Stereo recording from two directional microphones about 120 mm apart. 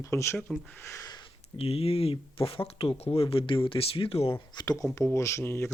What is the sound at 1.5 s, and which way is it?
Speech, 55° left (ahead or behind).